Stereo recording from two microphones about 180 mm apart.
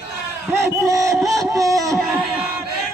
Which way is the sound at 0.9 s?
20° right (ahead or behind).